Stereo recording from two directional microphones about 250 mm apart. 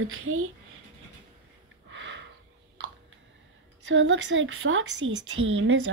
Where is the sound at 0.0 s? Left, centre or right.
Right.